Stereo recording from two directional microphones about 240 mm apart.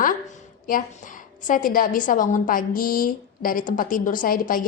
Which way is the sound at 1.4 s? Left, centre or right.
Left.